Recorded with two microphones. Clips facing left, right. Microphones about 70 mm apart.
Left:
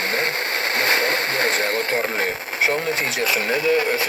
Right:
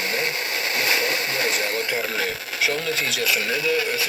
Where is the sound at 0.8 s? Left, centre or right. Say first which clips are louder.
Left 3 dB; left.